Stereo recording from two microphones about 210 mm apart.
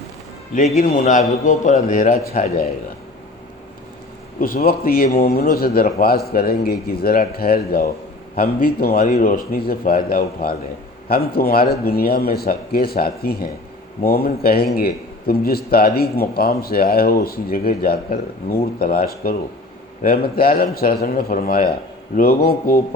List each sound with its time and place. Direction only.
0.5 s a man's voice: 40° left (ahead or behind)
4.4 s a man's voice: 40° left (ahead or behind)